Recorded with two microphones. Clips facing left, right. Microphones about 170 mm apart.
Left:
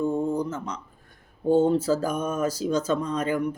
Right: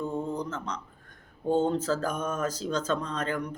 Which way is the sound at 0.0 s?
10° left (ahead or behind).